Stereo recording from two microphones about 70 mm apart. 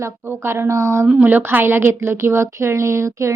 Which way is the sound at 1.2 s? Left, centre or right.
Right.